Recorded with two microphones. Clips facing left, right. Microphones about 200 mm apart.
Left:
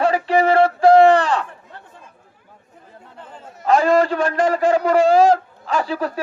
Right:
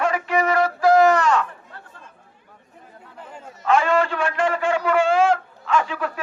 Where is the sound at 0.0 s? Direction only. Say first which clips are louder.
Left 5 dB; 30° left (ahead or behind).